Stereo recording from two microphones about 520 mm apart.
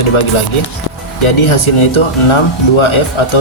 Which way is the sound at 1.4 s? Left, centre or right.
Left.